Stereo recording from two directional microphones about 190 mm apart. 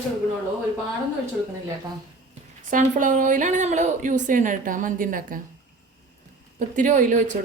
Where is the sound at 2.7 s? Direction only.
40° right (ahead or behind).